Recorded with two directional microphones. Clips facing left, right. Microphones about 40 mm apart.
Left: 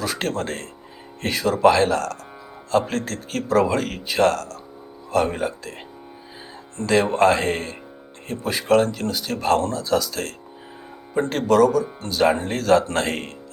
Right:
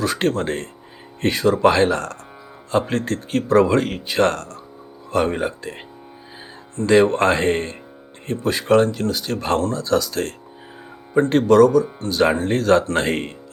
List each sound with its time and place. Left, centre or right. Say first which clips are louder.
0.0 s speech: right 5 dB; centre
6.8 s speech: right 2 dB; centre
8.3 s speech: right 2 dB; centre